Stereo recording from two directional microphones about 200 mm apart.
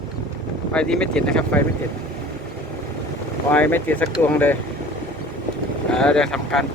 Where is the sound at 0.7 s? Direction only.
5° left (ahead or behind).